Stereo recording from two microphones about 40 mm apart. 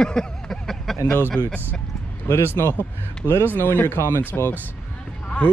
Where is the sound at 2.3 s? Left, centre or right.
Left.